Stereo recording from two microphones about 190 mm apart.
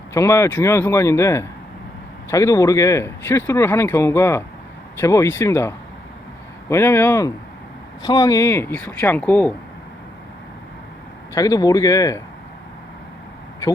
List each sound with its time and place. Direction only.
0.1 s speech: 15° left (ahead or behind)
11.3 s speech: 20° left (ahead or behind)